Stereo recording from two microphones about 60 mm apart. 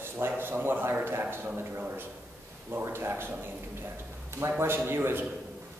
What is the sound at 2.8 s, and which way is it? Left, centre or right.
Speech, right.